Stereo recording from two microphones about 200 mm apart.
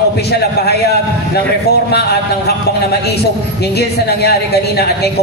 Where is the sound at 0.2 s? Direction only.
55° left (ahead or behind).